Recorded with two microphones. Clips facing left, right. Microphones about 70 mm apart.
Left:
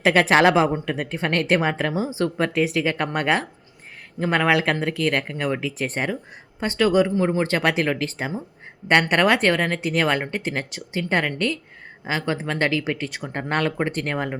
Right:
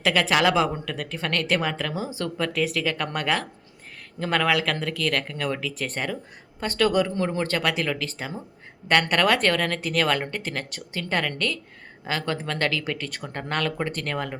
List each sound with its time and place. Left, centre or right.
0.0 s speech: left